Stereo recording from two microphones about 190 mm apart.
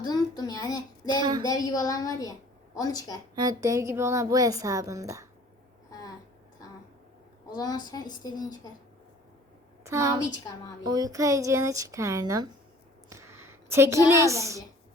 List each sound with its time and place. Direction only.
0.0 s a child's voice: 20° left (ahead or behind)
1.2 s a woman's voice: 25° right (ahead or behind)
1.5 s a child's voice: 20° left (ahead or behind)
3.3 s a woman's voice: 20° right (ahead or behind)
5.9 s a sound: 20° left (ahead or behind)
7.5 s a child's voice: 20° left (ahead or behind)
9.8 s a woman's voice: 15° right (ahead or behind)
10.3 s a child's voice: 20° left (ahead or behind)
10.8 s a woman's voice: 20° right (ahead or behind)
13.1 s a sound: 15° right (ahead or behind)
14.1 s a woman's voice: 15° right (ahead or behind)